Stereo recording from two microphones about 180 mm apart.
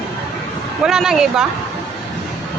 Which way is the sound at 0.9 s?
5° right (ahead or behind).